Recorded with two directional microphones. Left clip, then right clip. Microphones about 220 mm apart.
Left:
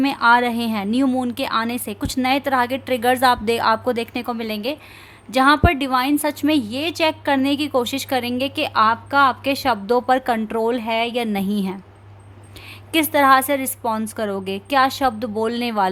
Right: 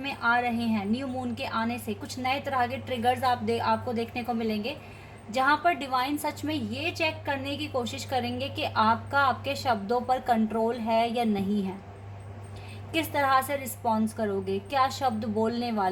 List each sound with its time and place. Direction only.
0.0 s a woman's voice: 45° left (ahead or behind)
12.9 s a woman's voice: 45° left (ahead or behind)